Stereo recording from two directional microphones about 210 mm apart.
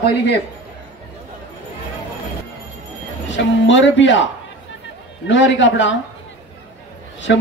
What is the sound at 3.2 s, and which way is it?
Speech, 60° left (ahead or behind).